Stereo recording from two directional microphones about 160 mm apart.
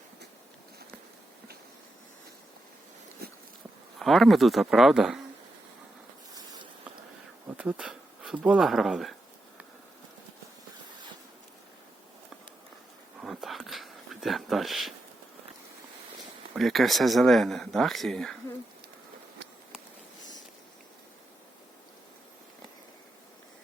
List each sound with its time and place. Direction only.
3.2 s dog: 75° right (ahead or behind)
4.0 s speech: centre (ahead or behind)
7.4 s speech: 10° right (ahead or behind)
13.2 s a sound: centre (ahead or behind)
16.6 s speech: centre (ahead or behind)